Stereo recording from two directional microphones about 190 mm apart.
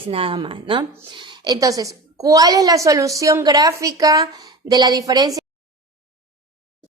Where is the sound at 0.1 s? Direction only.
30° right (ahead or behind).